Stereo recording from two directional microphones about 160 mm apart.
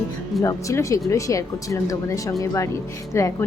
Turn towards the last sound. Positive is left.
turn(degrees=15)  # may be behind; listen again after turning